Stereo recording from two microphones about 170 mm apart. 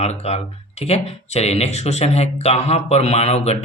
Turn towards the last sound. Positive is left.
turn(degrees=40)  # may be behind; listen again after turning